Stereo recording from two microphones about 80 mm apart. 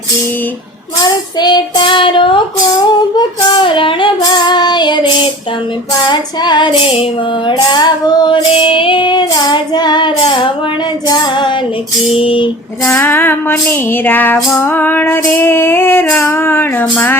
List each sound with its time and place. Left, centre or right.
1.0 s child singing: left
3.2 s female singing: left
11.1 s female singing: left
12.2 s child singing: left
12.8 s female singing: left